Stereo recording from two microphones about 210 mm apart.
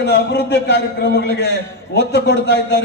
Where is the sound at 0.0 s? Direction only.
50° left (ahead or behind).